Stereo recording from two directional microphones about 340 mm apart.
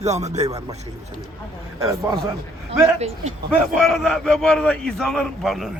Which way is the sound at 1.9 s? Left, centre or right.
Centre.